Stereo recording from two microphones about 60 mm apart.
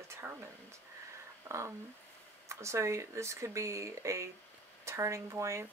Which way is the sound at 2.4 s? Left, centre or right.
Right.